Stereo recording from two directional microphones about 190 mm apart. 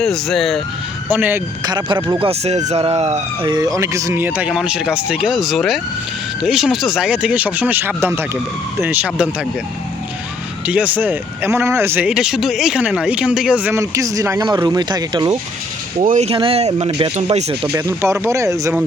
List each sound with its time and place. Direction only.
0.0 s speech: centre (ahead or behind)
1.6 s speech: 25° right (ahead or behind); by 9.5 s 5° right (ahead or behind)
10.7 s speech: 10° right (ahead or behind)
16.0 s speech: 40° right (ahead or behind)
17.8 s speech: 15° right (ahead or behind)